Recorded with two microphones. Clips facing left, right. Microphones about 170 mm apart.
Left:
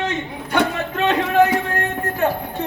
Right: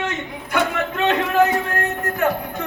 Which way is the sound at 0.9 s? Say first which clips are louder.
Left 1 dB; 35° left (ahead or behind).